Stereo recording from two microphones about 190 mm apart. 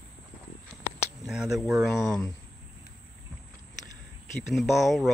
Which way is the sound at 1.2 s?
Centre (ahead or behind).